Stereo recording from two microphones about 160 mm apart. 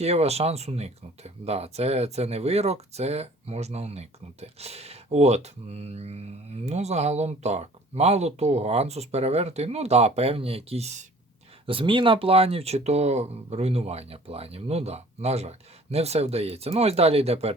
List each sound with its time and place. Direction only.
0.0 s speech: 40° right (ahead or behind)